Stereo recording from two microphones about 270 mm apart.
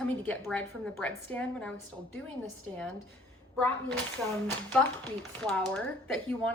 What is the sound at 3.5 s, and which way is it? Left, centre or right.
Speech, centre.